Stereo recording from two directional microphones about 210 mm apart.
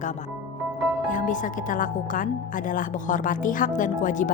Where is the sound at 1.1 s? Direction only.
40° left (ahead or behind).